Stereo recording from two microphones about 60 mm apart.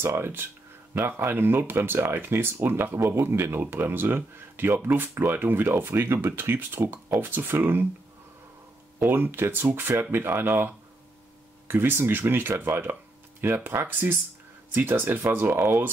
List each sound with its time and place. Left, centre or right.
0.0 s speech: right
9.1 s speech: right